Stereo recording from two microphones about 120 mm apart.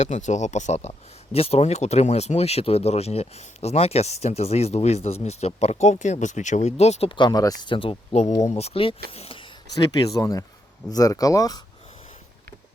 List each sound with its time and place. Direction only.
0.0 s speech: 75° left (ahead or behind)
7.1 s speech: 40° left (ahead or behind); by 8.4 s 70° left (ahead or behind)
8.5 s speech: 55° left (ahead or behind)
9.7 s speech: 30° left (ahead or behind)